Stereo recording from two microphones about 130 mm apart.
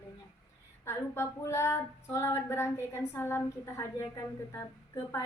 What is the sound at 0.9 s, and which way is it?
Female singing, 20° left (ahead or behind).